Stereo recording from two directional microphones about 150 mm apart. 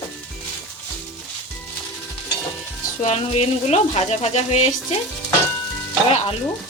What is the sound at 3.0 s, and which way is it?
Speech, 45° left (ahead or behind).